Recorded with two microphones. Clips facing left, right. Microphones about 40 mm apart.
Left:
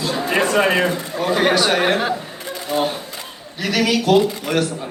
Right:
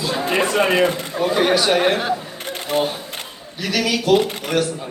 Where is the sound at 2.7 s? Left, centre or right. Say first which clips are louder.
Even; right.